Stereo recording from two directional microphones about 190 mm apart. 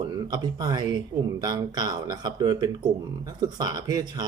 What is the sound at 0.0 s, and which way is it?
Speech, 20° right (ahead or behind).